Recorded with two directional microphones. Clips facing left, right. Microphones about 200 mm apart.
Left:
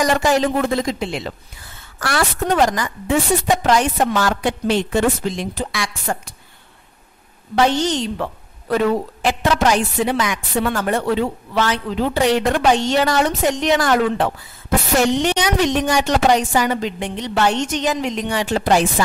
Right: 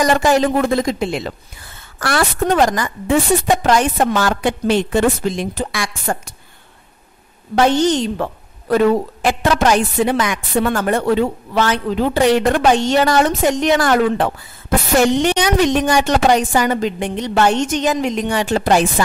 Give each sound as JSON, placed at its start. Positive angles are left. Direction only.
{"t": 0.1, "sound": "a woman's voice", "side_deg": -50}
{"t": 7.5, "sound": "a woman's voice", "side_deg": -50}